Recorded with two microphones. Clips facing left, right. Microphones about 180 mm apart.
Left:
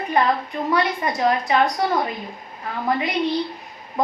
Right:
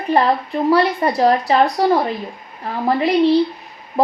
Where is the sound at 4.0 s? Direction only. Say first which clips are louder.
Right 6 dB; 35° right (ahead or behind).